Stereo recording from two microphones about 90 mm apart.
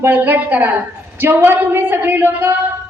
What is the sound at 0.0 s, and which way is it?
A woman's voice, 20° right (ahead or behind).